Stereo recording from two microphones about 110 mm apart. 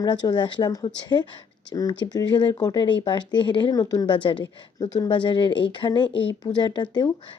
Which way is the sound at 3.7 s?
35° left (ahead or behind).